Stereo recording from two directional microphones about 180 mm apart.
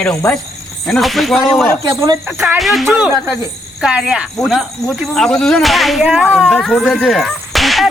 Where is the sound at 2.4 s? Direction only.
Centre (ahead or behind).